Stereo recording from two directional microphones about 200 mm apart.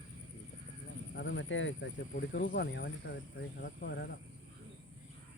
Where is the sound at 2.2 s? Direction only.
55° left (ahead or behind).